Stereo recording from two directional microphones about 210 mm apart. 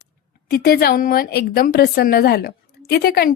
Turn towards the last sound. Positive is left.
turn(degrees=45)  # may be behind; listen again after turning